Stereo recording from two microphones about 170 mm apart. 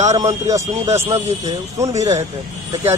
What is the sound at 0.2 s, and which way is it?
Speech, 20° right (ahead or behind).